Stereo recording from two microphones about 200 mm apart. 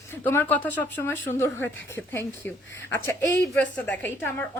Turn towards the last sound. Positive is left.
turn(degrees=10)  # may be behind; listen again after turning